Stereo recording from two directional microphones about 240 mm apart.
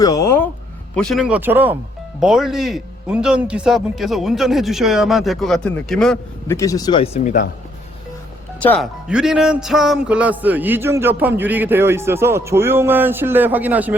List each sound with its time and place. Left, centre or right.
0.0 s a sound: centre
0.9 s a man's voice: centre
6.6 s speech: centre
8.6 s a man's voice: centre